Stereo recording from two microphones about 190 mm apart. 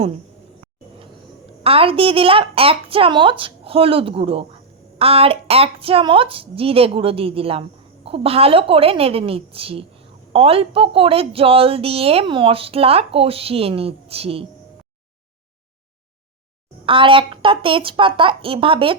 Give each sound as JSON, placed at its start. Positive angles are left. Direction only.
{"t": 1.6, "sound": "a woman's voice", "side_deg": -30}
{"t": 16.8, "sound": "a woman's voice", "side_deg": -25}